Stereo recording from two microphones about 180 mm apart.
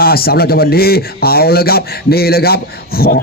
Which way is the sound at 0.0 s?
55° left (ahead or behind).